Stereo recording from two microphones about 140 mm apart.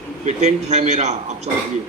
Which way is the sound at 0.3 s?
55° right (ahead or behind).